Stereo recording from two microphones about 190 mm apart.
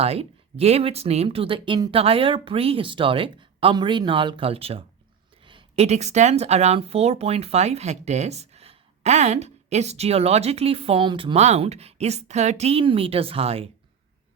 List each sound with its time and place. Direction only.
0.0 s speech: 30° right (ahead or behind)